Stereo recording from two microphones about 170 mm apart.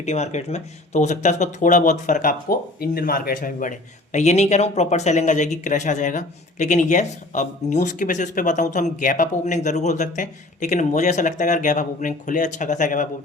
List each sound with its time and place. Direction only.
0.0 s speech: 40° left (ahead or behind)